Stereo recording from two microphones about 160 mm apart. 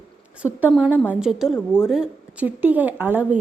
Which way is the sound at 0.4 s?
10° right (ahead or behind).